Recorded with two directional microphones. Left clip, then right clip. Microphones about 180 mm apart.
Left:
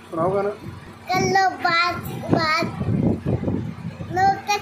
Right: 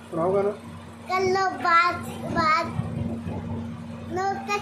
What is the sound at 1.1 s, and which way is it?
Child singing, 15° right (ahead or behind).